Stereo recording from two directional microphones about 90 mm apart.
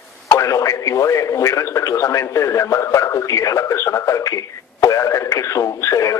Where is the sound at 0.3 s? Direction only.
35° left (ahead or behind).